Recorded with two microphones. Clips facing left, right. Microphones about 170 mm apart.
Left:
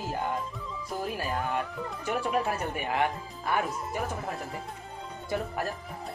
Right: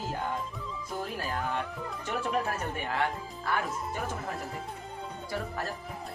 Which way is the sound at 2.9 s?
20° left (ahead or behind).